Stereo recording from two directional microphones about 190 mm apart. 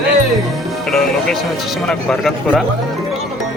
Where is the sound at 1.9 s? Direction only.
5° left (ahead or behind).